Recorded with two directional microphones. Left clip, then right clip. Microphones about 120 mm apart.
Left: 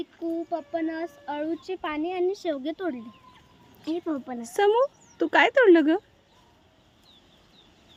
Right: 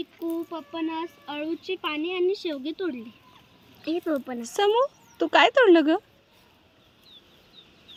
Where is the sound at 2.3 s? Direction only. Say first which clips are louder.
Left 1 dB; 50° left (ahead or behind).